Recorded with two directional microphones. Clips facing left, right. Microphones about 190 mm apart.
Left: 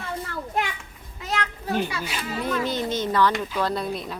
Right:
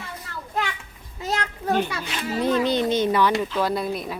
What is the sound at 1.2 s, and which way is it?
Children playing, 40° right (ahead or behind).